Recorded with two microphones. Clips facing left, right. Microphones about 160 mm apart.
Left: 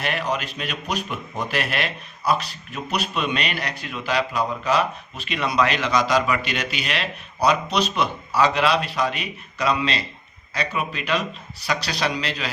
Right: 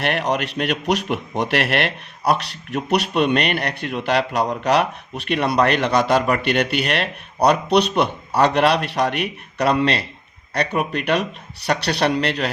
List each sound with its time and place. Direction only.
0.0 s a man's voice: 65° right (ahead or behind)